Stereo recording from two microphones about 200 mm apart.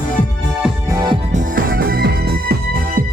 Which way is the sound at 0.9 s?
20° right (ahead or behind).